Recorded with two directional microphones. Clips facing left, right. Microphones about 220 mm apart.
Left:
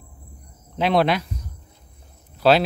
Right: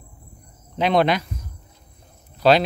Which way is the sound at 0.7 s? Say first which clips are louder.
Right 1 dB; centre (ahead or behind).